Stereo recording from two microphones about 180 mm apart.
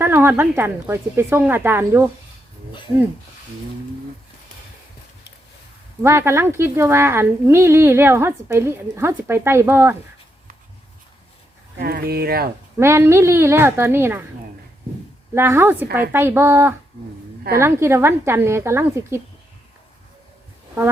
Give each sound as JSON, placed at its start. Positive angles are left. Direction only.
{"t": 0.0, "sound": "speech", "side_deg": -10}
{"t": 6.0, "sound": "speech", "side_deg": -15}
{"t": 11.8, "sound": "speech", "side_deg": -60}
{"t": 12.8, "sound": "speech", "side_deg": -15}
{"t": 15.4, "sound": "speech", "side_deg": -15}